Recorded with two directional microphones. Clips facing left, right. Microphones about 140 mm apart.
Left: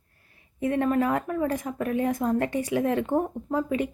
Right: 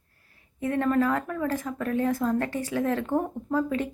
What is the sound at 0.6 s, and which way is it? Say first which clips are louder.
A woman's voice: even; 20° left (ahead or behind).